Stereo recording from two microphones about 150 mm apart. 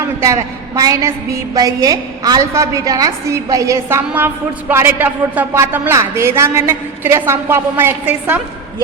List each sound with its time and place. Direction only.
0.0 s a woman's voice: 20° right (ahead or behind)